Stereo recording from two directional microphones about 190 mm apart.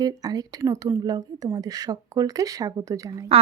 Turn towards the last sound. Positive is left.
turn(degrees=-15)  # may be behind; listen again after turning